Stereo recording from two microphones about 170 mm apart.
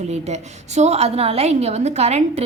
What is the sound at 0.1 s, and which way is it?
A woman's voice, 40° right (ahead or behind).